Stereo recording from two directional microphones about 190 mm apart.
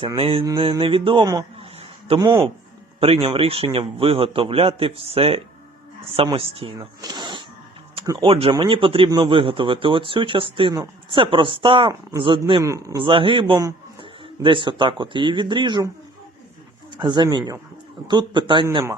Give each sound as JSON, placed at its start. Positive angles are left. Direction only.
{"t": 0.2, "sound": "speech", "side_deg": -30}
{"t": 6.7, "sound": "a sound", "side_deg": -20}
{"t": 8.0, "sound": "speech", "side_deg": -25}
{"t": 17.0, "sound": "speech", "side_deg": -25}